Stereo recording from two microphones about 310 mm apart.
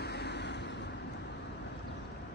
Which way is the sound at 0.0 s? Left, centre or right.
Left.